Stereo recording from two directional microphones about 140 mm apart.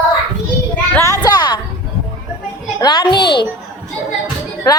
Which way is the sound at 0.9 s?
25° left (ahead or behind).